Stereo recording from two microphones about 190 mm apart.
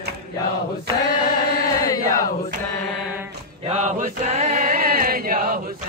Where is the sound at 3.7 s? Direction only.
40° right (ahead or behind).